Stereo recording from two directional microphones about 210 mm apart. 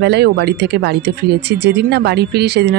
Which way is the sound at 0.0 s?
50° right (ahead or behind).